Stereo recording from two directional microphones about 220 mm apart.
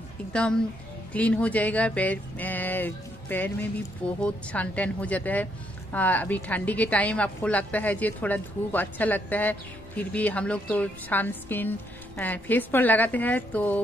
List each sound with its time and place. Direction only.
0.3 s a woman's voice: 5° left (ahead or behind)